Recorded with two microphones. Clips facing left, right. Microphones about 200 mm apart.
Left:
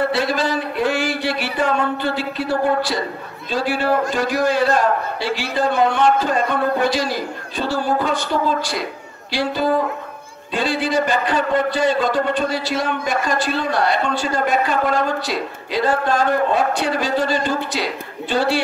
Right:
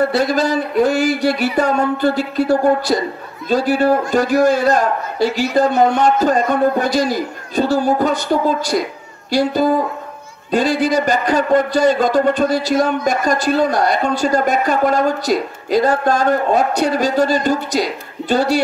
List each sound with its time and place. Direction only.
0.1 s a man's voice: 40° right (ahead or behind)
9.3 s a man's voice: 45° right (ahead or behind)